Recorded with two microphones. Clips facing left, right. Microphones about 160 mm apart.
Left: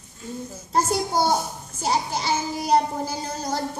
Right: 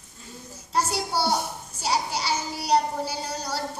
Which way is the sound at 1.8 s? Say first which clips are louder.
Left 2 dB; 50° left (ahead or behind).